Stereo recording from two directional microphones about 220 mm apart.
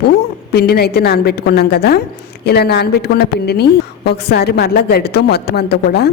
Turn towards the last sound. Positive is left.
turn(degrees=45)  # may be behind; listen again after turning